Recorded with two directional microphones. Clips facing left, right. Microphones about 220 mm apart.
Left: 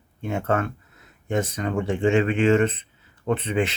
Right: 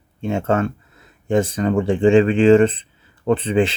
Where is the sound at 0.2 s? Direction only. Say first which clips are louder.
Right 5 dB; 25° right (ahead or behind).